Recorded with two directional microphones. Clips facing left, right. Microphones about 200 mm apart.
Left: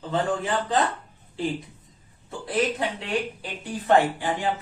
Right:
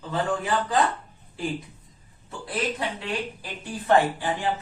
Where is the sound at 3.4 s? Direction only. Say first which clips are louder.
Left 2 dB; 20° left (ahead or behind).